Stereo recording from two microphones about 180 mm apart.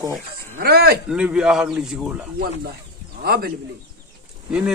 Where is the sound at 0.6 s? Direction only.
60° right (ahead or behind).